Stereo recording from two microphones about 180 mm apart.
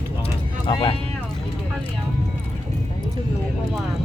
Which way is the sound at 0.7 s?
25° left (ahead or behind).